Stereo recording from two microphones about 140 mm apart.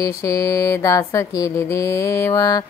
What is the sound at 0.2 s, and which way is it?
Mantra, 25° left (ahead or behind).